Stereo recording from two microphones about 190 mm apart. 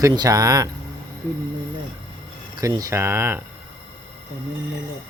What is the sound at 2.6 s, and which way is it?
Speech, 20° right (ahead or behind).